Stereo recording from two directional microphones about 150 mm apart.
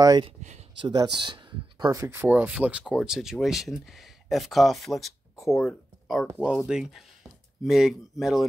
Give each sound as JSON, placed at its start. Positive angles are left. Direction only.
{"t": 0.0, "sound": "speech", "side_deg": -25}